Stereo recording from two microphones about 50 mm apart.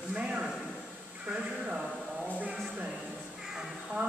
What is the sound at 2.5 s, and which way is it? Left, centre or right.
Speech, centre.